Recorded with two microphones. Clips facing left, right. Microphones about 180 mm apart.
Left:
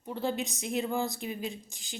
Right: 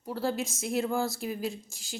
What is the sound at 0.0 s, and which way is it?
Speech, centre (ahead or behind).